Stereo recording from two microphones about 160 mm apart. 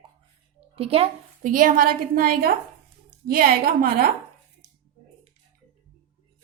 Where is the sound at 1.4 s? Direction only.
55° right (ahead or behind).